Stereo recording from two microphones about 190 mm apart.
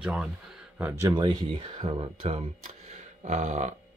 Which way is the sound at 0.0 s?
5° right (ahead or behind).